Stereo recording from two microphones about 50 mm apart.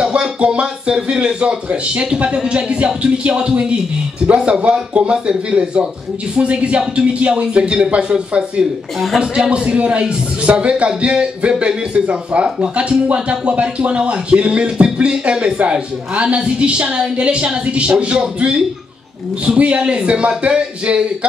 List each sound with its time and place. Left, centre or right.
0.0 s a man's voice: right